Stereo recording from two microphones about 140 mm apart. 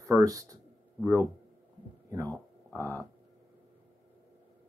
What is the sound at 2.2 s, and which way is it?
Speech, 10° left (ahead or behind).